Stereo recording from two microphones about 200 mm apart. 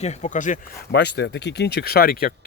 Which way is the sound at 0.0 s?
35° left (ahead or behind).